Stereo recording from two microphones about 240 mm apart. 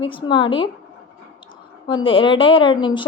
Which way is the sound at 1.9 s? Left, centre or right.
Left.